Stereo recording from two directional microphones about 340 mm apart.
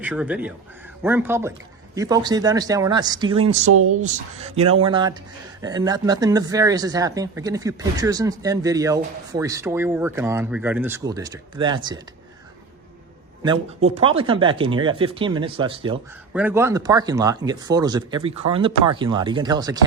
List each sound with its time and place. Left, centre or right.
0.0 s speech: centre
3.7 s speech: right
4.0 s speech: centre
13.4 s speech: centre